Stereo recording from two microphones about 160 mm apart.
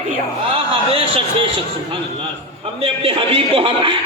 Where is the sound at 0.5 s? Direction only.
35° right (ahead or behind).